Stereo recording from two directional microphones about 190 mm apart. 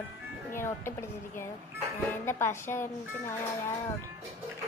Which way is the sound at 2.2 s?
15° left (ahead or behind).